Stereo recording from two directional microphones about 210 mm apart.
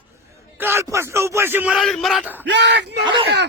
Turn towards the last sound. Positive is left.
turn(degrees=-25)  # may be behind; listen again after turning